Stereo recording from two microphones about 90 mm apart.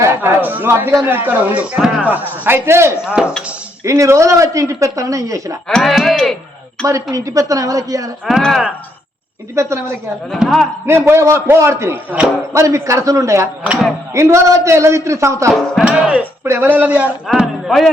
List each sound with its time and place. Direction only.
0.0 s a sound: 25° right (ahead or behind)
1.0 s a man's voice: 20° right (ahead or behind)
3.2 s speech: 5° right (ahead or behind)
3.8 s speech: 35° right (ahead or behind)
5.6 s speech: 5° left (ahead or behind)
6.8 s speech: 35° right (ahead or behind)
8.3 s speech: 5° left (ahead or behind)
9.6 s a man's voice: 30° right (ahead or behind)
10.3 s speech: centre (ahead or behind)
10.8 s speech: 25° right (ahead or behind)
15.8 s speech: 15° right (ahead or behind)
16.4 s a man's voice: 20° right (ahead or behind)
17.2 s speech: 5° right (ahead or behind)